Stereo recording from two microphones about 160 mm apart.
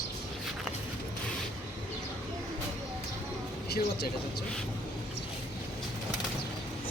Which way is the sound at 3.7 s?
90° left.